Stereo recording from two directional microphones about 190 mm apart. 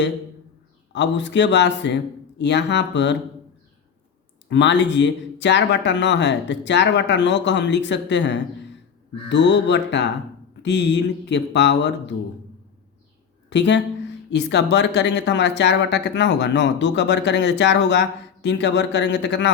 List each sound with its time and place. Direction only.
0.9 s speech: 70° left (ahead or behind)
4.4 s speech: 70° left (ahead or behind)
13.5 s speech: 70° left (ahead or behind)